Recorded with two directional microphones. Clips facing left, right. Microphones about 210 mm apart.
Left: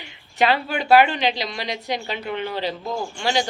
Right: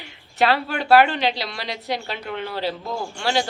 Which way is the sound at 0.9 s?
Centre (ahead or behind).